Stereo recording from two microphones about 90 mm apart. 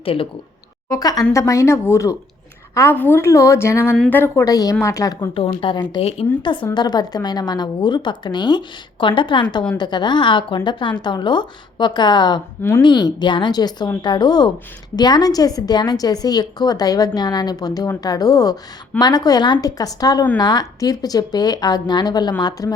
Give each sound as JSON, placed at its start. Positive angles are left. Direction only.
{"t": 0.0, "sound": "speech", "side_deg": 90}
{"t": 0.9, "sound": "speech", "side_deg": 45}
{"t": 2.9, "sound": "speech", "side_deg": 20}
{"t": 4.4, "sound": "speech", "side_deg": 40}
{"t": 5.3, "sound": "speech", "side_deg": 75}
{"t": 6.0, "sound": "speech", "side_deg": 75}
{"t": 6.7, "sound": "a woman's voice", "side_deg": 50}